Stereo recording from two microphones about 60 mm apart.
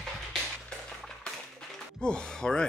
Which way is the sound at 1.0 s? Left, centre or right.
Centre.